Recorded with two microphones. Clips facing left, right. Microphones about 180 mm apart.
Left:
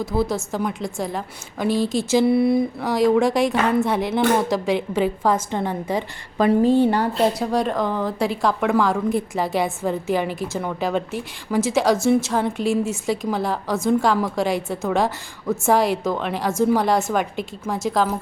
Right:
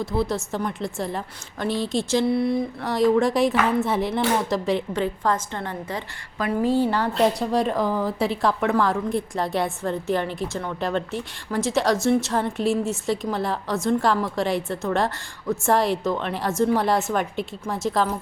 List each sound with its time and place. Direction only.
0.0 s a woman's voice: centre (ahead or behind)
6.4 s a woman's voice: 25° left (ahead or behind)
7.1 s a woman's voice: 5° left (ahead or behind)